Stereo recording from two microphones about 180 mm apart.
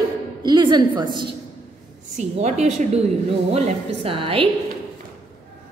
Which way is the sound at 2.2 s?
40° right (ahead or behind).